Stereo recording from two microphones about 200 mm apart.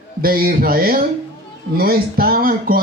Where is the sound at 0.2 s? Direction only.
50° right (ahead or behind).